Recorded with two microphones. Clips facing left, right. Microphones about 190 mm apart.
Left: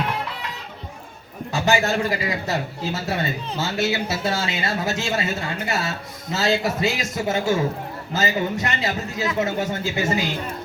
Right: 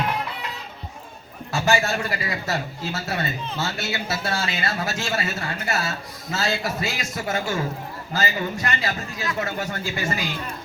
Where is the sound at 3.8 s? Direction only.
20° left (ahead or behind).